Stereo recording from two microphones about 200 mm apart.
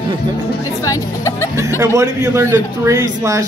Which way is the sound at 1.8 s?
15° right (ahead or behind).